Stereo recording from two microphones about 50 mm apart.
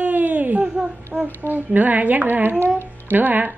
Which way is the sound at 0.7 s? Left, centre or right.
Centre.